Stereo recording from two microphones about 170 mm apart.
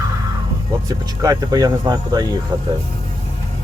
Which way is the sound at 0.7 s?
20° right (ahead or behind).